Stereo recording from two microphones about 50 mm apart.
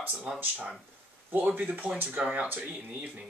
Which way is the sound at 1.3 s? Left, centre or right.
Right.